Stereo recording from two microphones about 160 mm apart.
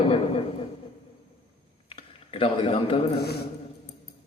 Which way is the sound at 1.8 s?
35° left (ahead or behind).